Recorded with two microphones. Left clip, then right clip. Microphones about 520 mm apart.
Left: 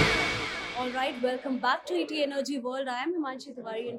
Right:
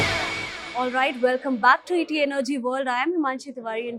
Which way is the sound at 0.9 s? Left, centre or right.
Right.